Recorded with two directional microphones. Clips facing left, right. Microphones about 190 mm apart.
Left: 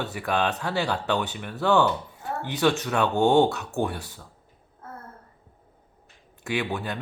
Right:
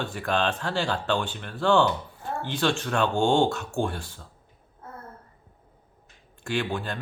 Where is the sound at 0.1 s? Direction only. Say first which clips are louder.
Even; 10° left (ahead or behind).